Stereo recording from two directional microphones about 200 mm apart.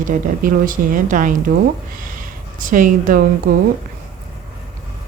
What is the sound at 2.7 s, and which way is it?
Speech, 40° right (ahead or behind).